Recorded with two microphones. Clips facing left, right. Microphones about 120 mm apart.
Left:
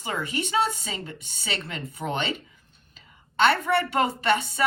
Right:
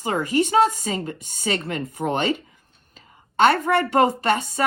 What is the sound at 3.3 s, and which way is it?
Speech, 45° right (ahead or behind).